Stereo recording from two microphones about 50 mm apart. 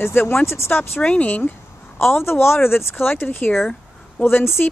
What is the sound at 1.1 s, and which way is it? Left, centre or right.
Speech, left.